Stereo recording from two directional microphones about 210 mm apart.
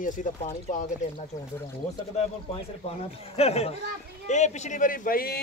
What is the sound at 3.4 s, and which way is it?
Speech, 30° left (ahead or behind).